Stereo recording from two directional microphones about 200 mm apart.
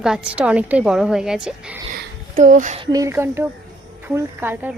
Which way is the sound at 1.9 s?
40° right (ahead or behind).